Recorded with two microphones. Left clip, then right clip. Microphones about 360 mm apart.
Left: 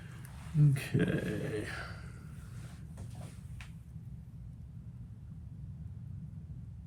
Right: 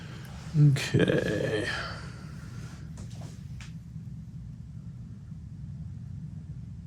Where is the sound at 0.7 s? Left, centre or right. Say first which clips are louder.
Right 9 dB; centre.